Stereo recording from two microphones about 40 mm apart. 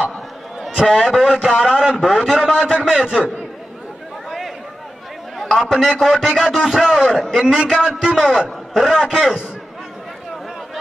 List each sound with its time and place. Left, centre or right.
0.6 s a man's voice: centre
5.6 s a man's voice: centre